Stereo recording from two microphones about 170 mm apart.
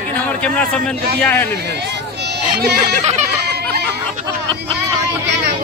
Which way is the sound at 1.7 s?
80° right.